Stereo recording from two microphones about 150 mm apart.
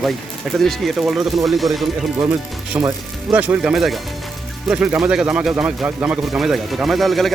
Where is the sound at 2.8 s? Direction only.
10° right (ahead or behind).